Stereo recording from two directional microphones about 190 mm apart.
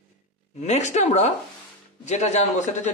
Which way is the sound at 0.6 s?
35° left (ahead or behind).